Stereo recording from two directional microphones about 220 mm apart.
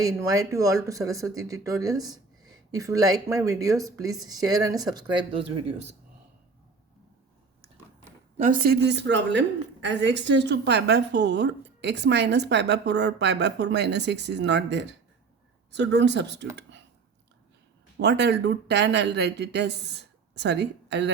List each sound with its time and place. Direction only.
0.0 s speech: 15° right (ahead or behind)
8.4 s a woman's voice: 35° right (ahead or behind)
18.0 s a woman's voice: 50° right (ahead or behind)